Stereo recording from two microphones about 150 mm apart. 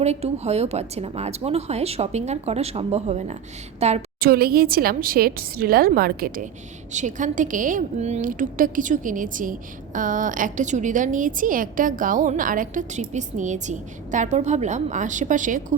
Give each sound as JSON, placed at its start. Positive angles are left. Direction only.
{"t": 0.0, "sound": "a woman's voice", "side_deg": -45}
{"t": 4.2, "sound": "speech", "side_deg": -90}
{"t": 6.9, "sound": "a woman's voice", "side_deg": -55}